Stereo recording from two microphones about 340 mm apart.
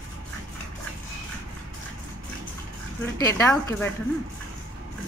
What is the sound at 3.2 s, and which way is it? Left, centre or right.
Speech, centre.